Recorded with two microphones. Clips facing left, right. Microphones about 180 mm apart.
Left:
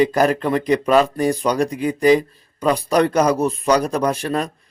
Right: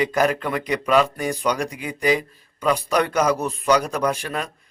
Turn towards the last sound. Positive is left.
turn(degrees=35)  # may be behind; listen again after turning